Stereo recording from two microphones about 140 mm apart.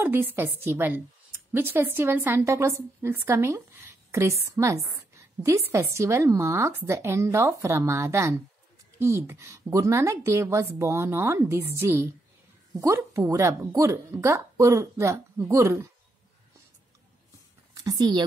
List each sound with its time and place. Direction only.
0.0 s a woman's voice: 15° right (ahead or behind)
17.7 s speech: 30° right (ahead or behind)